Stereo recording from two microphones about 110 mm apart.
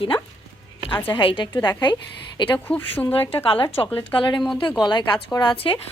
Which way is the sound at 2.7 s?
20° left (ahead or behind).